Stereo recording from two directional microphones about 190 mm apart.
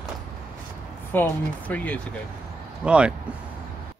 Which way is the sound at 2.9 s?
5° right (ahead or behind).